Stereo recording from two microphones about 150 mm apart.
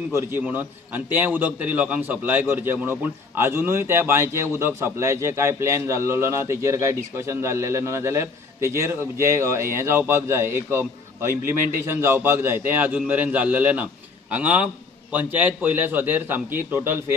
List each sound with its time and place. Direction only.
0.1 s a man's voice: 15° right (ahead or behind)